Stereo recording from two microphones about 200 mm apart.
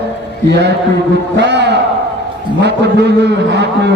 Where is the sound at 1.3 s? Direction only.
60° right (ahead or behind).